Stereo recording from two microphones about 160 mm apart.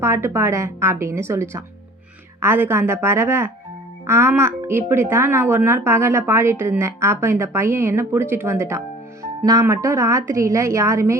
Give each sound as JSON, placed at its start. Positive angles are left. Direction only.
{"t": 0.0, "sound": "a woman's voice", "side_deg": -15}